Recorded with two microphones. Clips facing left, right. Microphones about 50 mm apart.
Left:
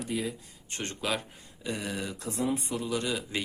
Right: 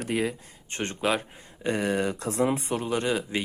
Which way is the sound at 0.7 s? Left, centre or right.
Right.